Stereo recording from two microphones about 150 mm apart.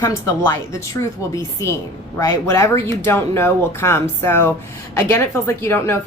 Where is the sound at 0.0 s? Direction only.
20° left (ahead or behind).